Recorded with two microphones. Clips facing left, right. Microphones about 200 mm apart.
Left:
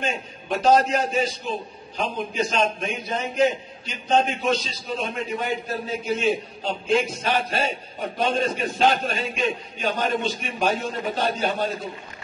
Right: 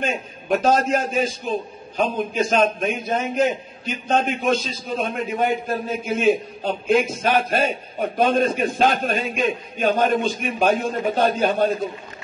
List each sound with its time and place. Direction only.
0.0 s a man's voice: 50° right (ahead or behind)